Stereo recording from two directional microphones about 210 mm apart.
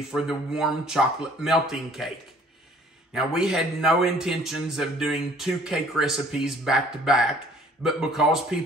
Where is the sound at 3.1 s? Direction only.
Centre (ahead or behind).